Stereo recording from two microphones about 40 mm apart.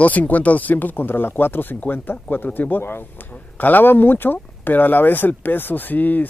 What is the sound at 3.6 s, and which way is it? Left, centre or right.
Speech, left.